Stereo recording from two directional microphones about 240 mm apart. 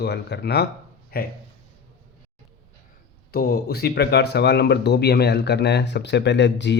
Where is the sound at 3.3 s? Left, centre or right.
Left.